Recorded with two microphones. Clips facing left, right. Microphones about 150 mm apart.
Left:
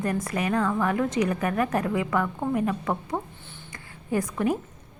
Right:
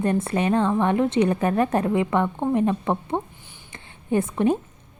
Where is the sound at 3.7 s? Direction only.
25° right (ahead or behind).